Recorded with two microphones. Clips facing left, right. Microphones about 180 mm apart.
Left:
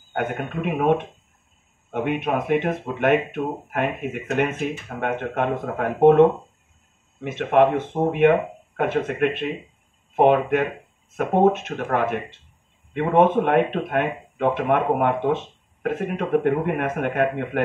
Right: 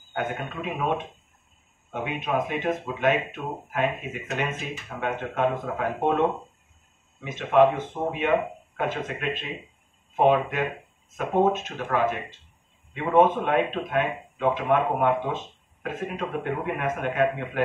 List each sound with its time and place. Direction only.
0.1 s speech: 55° left (ahead or behind)
7.2 s speech: 65° left (ahead or behind)